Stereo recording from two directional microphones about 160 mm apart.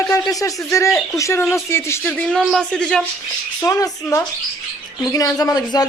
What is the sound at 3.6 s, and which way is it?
Speech, 20° left (ahead or behind).